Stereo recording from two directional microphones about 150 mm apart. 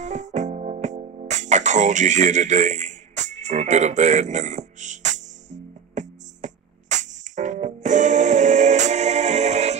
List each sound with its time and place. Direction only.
0.0 s music: 55° right (ahead or behind)